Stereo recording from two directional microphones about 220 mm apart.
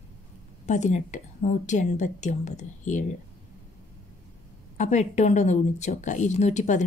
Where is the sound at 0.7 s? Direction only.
35° left (ahead or behind).